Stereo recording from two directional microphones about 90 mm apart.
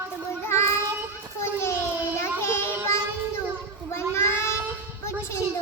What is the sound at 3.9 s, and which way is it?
Child singing, 30° left (ahead or behind).